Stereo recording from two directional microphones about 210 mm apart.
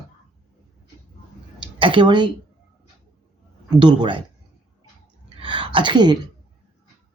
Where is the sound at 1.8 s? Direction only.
25° right (ahead or behind).